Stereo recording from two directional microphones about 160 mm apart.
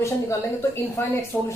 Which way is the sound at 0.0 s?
20° left (ahead or behind).